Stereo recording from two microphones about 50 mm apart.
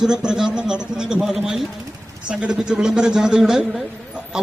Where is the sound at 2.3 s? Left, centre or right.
Centre.